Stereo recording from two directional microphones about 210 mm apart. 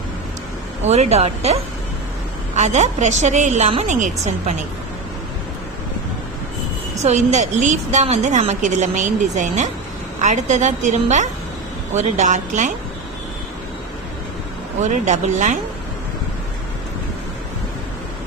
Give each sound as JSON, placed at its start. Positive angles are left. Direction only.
{"t": 0.9, "sound": "a woman's voice", "side_deg": -30}
{"t": 2.6, "sound": "a woman's voice", "side_deg": -35}
{"t": 7.0, "sound": "a woman's voice", "side_deg": -35}
{"t": 14.8, "sound": "a woman's voice", "side_deg": -35}